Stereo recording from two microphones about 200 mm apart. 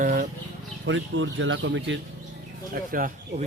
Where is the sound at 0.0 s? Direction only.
40° right (ahead or behind).